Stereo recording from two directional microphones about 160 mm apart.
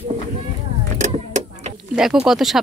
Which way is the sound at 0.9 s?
50° right (ahead or behind).